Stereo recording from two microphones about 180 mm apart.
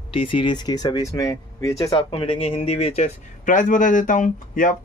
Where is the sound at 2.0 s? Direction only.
30° left (ahead or behind).